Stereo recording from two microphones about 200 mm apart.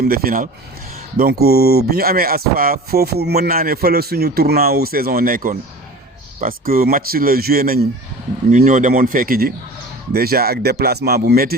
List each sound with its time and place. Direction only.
0.0 s speech: 45° right (ahead or behind)